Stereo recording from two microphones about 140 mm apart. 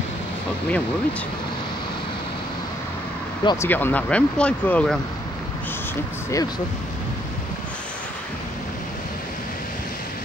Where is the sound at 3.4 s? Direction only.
20° left (ahead or behind).